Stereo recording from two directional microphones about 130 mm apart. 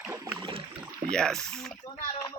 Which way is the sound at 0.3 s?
40° right (ahead or behind).